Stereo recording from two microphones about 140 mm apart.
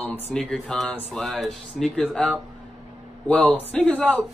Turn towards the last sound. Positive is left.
turn(degrees=5)  # may be behind; listen again after turning